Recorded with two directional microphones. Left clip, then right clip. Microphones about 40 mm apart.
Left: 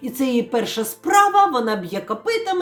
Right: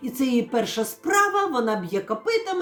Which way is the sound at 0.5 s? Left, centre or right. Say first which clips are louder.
Left 2 dB; left.